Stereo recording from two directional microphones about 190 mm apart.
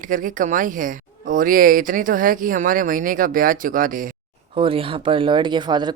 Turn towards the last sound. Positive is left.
turn(degrees=-25)  # may be behind; listen again after turning